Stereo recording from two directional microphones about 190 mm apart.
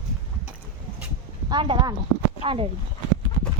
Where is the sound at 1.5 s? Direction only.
25° right (ahead or behind).